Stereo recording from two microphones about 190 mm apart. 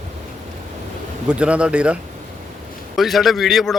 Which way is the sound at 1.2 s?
5° right (ahead or behind).